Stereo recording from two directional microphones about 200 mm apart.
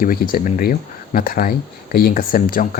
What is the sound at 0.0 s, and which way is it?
Speech, 45° left (ahead or behind).